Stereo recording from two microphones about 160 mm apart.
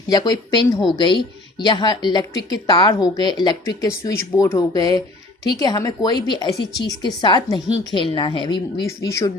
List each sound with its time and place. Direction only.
0.1 s speech: 25° left (ahead or behind)